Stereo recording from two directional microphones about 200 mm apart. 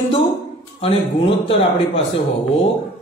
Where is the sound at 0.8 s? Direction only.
25° left (ahead or behind).